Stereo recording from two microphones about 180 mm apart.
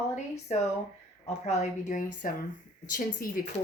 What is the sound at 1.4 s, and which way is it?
A woman's voice, 40° left (ahead or behind).